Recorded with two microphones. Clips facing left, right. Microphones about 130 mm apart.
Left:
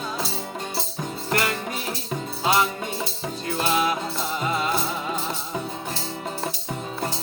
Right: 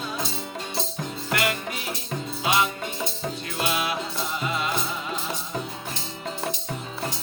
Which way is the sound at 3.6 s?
40° left (ahead or behind).